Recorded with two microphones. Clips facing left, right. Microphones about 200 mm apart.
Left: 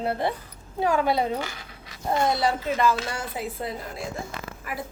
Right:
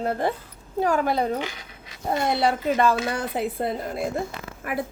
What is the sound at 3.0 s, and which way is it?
Speech, 55° right (ahead or behind).